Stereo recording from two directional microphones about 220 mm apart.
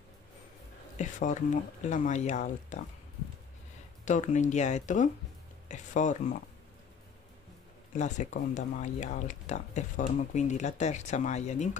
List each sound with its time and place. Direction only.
0.9 s speech: 35° left (ahead or behind)
4.0 s speech: 35° left (ahead or behind)
8.0 s speech: 35° left (ahead or behind)